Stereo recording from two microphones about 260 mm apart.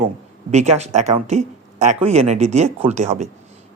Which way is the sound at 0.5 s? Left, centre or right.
Right.